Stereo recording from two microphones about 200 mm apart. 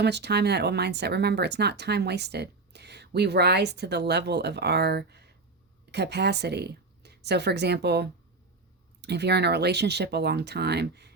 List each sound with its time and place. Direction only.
0.0 s a woman's voice: 55° right (ahead or behind)